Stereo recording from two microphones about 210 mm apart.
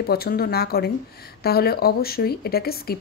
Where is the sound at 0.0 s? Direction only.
45° left (ahead or behind).